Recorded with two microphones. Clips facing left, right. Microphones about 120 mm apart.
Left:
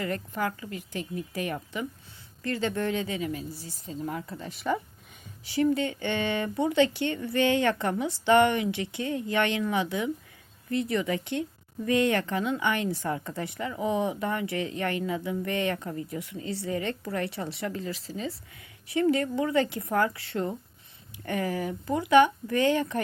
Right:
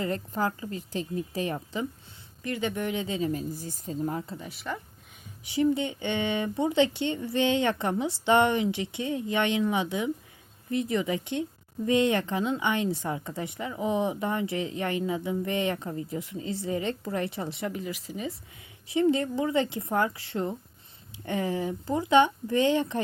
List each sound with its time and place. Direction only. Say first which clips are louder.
0.0 s speech: right 1 dB; 30° right (ahead or behind)
3.5 s speech: right 4 dB; 50° right (ahead or behind)
4.4 s speech: left 6 dB; 5° right (ahead or behind)
5.7 s speech: left 1 dB; 20° right (ahead or behind)